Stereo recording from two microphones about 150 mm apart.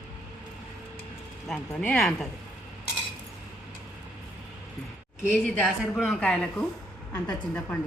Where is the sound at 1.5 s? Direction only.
5° left (ahead or behind).